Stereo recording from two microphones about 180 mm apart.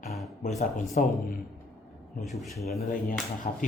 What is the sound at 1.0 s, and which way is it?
Speech, 45° left (ahead or behind).